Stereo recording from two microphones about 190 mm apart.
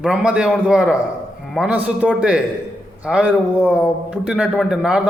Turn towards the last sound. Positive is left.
turn(degrees=-5)  # may be behind; listen again after turning